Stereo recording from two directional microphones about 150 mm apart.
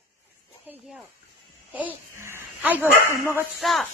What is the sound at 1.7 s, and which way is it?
Speech, 15° right (ahead or behind).